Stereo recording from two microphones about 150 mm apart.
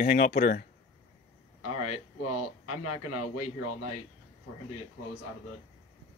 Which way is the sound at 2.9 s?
50° left (ahead or behind).